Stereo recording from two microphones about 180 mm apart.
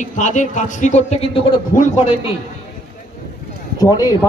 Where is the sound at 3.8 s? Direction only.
20° left (ahead or behind).